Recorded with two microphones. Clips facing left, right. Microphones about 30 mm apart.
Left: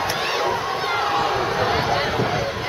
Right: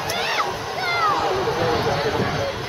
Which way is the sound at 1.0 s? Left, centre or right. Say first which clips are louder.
Right 1 dB; centre.